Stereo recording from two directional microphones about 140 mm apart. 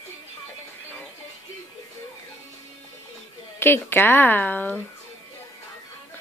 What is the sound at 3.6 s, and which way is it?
Speech, 15° left (ahead or behind).